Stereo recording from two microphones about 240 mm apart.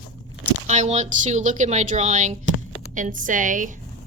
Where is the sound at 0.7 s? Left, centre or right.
Right.